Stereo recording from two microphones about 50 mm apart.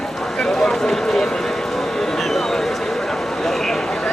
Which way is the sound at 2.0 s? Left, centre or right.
Centre.